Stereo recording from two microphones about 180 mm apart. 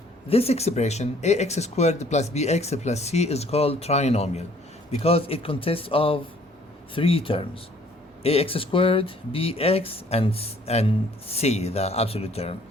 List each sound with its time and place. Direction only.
0.3 s speech: 35° left (ahead or behind)